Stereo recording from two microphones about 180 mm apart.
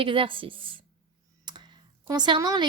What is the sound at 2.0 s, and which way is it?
Speech, 25° right (ahead or behind).